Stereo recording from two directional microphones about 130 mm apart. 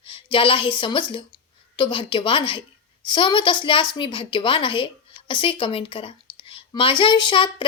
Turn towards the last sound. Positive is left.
turn(degrees=35)  # may be behind; listen again after turning